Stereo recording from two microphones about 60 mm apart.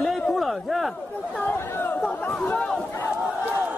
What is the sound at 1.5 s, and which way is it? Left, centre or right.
Speech, left.